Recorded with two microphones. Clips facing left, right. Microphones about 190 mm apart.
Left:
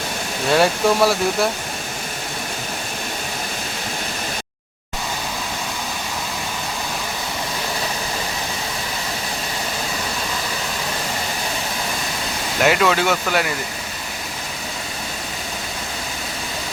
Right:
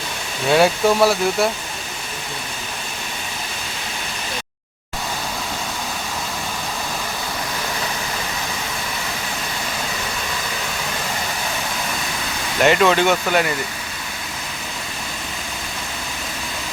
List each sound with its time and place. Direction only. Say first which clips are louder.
0.5 s speech: right 1 dB; centre (ahead or behind)
12.6 s speech: right 2 dB; centre (ahead or behind)